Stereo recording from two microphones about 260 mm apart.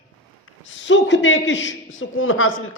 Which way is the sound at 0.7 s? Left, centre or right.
Left.